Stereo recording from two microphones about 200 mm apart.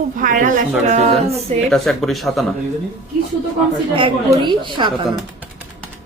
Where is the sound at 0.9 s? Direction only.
35° right (ahead or behind).